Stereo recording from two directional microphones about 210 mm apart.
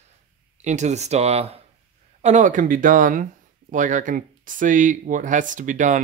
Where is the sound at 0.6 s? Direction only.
35° right (ahead or behind).